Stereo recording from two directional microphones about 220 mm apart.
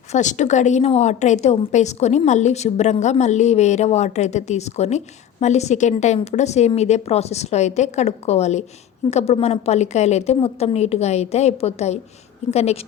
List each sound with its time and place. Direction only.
0.1 s a woman's voice: 35° left (ahead or behind)